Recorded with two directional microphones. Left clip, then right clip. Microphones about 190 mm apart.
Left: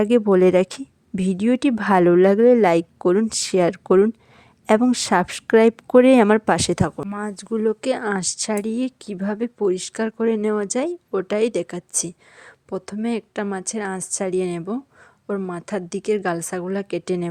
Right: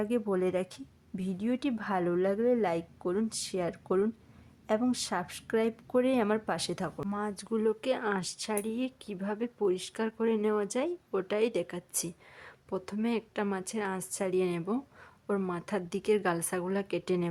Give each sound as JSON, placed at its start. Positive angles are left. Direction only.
{"t": 0.0, "sound": "speech", "side_deg": 50}
{"t": 7.1, "sound": "a woman's voice", "side_deg": 25}